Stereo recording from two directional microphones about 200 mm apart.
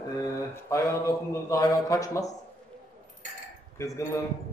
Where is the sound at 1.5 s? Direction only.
15° left (ahead or behind).